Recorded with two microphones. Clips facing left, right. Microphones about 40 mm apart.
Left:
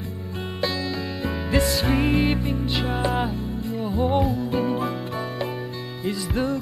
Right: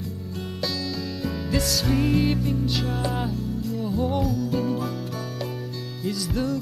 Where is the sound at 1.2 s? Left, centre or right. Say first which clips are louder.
Left 4 dB; left.